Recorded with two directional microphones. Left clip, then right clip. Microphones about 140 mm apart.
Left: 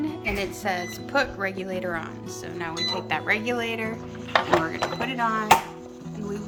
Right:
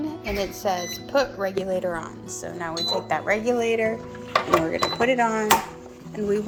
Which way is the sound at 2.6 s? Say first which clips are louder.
Right 2 dB; 35° left (ahead or behind).